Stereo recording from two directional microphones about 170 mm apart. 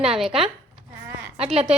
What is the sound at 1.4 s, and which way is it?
Speech, 35° right (ahead or behind).